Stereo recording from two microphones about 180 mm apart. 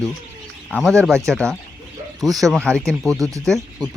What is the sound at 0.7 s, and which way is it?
Speech, 10° left (ahead or behind).